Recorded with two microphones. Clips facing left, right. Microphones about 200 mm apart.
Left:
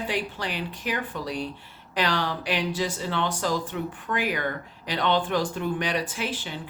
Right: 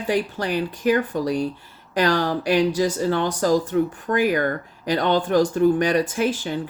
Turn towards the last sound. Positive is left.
turn(degrees=-45)  # may be behind; listen again after turning